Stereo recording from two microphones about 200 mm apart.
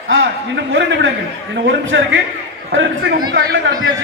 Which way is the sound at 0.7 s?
65° right (ahead or behind).